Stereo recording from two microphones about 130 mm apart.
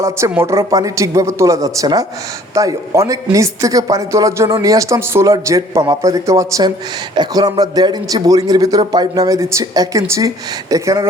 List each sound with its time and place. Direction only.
0.0 s a man's voice: 20° right (ahead or behind)